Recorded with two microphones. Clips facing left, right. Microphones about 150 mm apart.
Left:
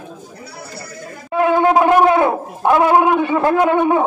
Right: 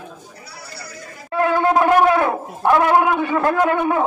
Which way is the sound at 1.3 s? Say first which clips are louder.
Left 3 dB; 20° left (ahead or behind).